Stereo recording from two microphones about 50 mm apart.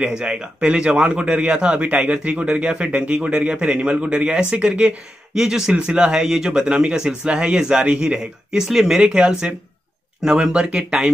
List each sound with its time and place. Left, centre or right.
0.0 s speech: centre
5.4 s speech: centre
6.6 s speech: right
8.5 s speech: centre
9.0 s speech: right